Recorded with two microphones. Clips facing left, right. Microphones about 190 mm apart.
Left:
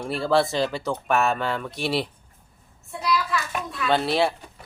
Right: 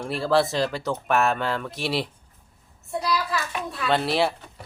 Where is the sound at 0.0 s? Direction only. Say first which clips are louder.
Even; centre (ahead or behind).